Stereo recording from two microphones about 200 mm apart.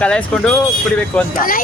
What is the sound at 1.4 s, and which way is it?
Speech, 45° left (ahead or behind).